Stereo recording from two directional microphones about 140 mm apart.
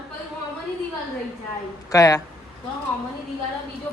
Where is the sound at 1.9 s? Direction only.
25° left (ahead or behind).